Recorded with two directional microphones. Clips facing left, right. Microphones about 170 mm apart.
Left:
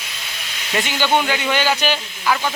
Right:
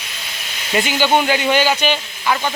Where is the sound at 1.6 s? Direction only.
Centre (ahead or behind).